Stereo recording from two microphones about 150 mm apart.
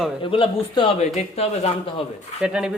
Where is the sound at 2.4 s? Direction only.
5° right (ahead or behind).